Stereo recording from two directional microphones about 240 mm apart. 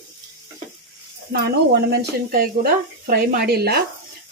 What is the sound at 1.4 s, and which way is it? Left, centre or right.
Speech, right.